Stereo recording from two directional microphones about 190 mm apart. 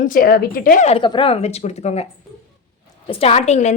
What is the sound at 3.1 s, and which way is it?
Speech, 30° left (ahead or behind).